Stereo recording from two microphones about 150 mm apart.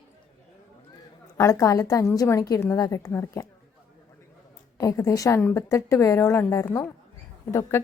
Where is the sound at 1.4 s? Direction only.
20° left (ahead or behind).